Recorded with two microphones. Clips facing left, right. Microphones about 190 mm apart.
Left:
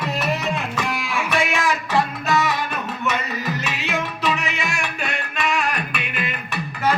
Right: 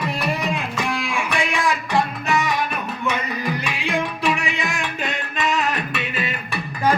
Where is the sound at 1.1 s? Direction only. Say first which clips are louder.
Left 1 dB; 15° right (ahead or behind).